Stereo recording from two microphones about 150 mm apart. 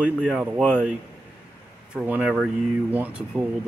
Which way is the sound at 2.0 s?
10° right (ahead or behind).